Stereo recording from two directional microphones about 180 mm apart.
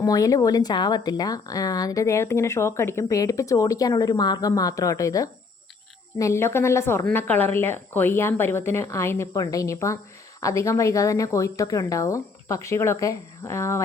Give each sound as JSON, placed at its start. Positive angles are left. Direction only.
{"t": 0.0, "sound": "a woman's voice", "side_deg": 20}